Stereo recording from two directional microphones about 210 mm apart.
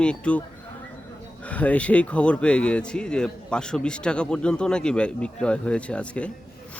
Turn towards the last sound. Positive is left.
turn(degrees=5)  # may be behind; listen again after turning